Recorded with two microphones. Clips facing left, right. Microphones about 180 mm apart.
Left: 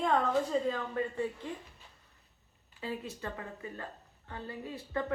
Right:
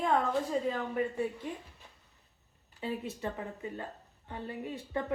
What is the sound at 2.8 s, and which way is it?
Speech, 20° right (ahead or behind).